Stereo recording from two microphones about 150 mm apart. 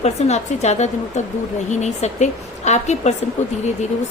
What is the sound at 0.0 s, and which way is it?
A woman's voice, 45° left (ahead or behind).